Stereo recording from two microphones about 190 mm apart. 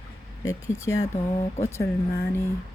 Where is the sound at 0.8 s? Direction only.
15° left (ahead or behind).